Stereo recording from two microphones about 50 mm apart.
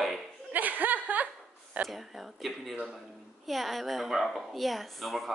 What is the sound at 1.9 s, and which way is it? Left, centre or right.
Speech, centre.